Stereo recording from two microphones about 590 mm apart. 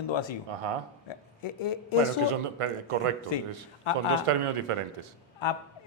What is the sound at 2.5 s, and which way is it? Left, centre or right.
Speech, right.